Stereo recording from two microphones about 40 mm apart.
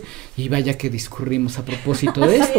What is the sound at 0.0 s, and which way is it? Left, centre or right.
Speech, centre.